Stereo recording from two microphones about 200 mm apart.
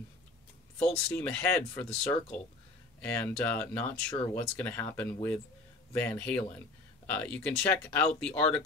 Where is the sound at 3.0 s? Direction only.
10° left (ahead or behind).